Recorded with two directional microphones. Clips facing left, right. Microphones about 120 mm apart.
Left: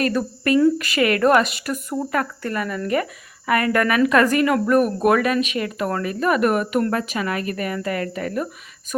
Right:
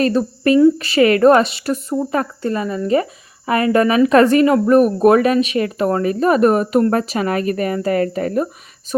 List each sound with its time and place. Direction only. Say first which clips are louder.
0.0 s speech: right 5 dB; 30° right (ahead or behind)